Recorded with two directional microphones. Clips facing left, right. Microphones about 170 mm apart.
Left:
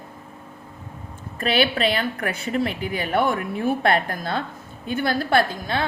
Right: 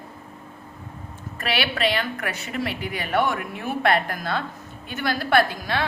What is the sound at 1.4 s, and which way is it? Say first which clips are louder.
A woman's voice: left 4 dB; 30° left (ahead or behind).